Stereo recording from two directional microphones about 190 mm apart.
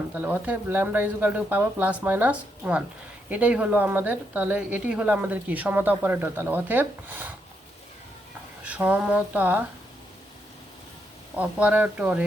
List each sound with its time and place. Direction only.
0.1 s speech: 10° right (ahead or behind)
8.6 s speech: 10° right (ahead or behind)
11.3 s speech: 10° right (ahead or behind)